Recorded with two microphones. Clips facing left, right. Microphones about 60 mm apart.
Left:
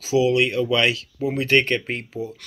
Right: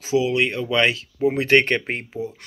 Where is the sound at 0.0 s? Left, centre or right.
Right.